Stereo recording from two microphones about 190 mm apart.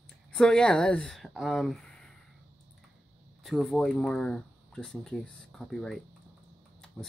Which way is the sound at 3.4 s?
Centre (ahead or behind).